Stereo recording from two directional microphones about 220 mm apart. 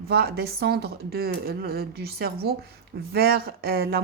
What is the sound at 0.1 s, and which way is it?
A woman's voice, 45° right (ahead or behind).